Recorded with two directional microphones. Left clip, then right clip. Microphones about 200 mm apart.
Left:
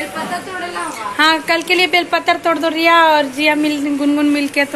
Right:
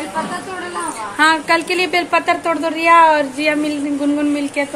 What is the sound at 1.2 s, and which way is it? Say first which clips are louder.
A woman's voice: even; centre (ahead or behind).